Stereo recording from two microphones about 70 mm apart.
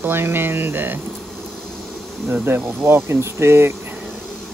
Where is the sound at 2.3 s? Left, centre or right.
Right.